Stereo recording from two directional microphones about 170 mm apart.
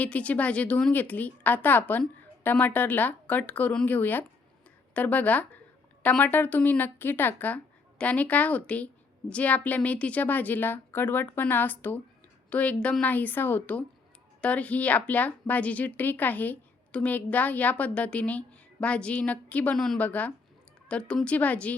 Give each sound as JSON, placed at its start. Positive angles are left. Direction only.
{"t": 0.0, "sound": "a woman's voice", "side_deg": 10}